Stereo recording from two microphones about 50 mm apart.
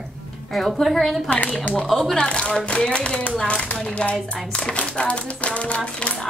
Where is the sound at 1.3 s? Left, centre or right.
Left.